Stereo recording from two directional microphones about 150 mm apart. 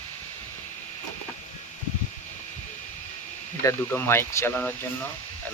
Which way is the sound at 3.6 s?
15° left (ahead or behind).